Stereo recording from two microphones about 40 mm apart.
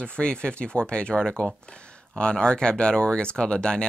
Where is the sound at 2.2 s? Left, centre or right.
Left.